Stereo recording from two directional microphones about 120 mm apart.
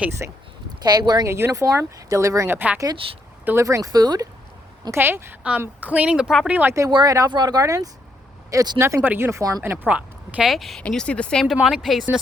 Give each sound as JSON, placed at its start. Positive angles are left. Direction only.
{"t": 0.2, "sound": "a woman's voice", "side_deg": -15}
{"t": 0.7, "sound": "speech", "side_deg": -35}
{"t": 1.3, "sound": "speech", "side_deg": -25}
{"t": 2.6, "sound": "a woman's voice", "side_deg": -15}
{"t": 3.0, "sound": "speech", "side_deg": -45}
{"t": 3.4, "sound": "speech", "side_deg": -20}
{"t": 4.9, "sound": "a woman's voice", "side_deg": -20}
{"t": 6.5, "sound": "speech", "side_deg": -15}
{"t": 6.9, "sound": "speech", "side_deg": -35}
{"t": 9.0, "sound": "speech", "side_deg": -20}
{"t": 9.6, "sound": "speech", "side_deg": -15}
{"t": 10.5, "sound": "speech", "side_deg": 0}